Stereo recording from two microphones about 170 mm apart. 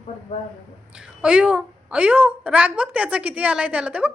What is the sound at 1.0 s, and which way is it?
A woman's voice, 5° right (ahead or behind).